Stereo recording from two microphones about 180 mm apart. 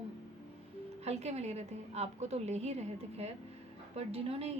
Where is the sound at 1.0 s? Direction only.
35° right (ahead or behind).